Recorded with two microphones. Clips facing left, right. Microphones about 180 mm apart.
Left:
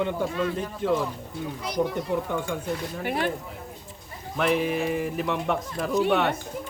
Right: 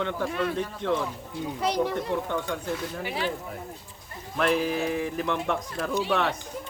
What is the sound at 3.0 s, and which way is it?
Speech, 55° left (ahead or behind).